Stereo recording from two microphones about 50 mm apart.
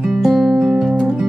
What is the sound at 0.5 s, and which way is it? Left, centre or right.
Music, centre.